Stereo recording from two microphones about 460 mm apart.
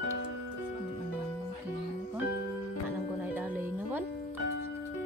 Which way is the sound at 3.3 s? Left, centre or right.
Centre.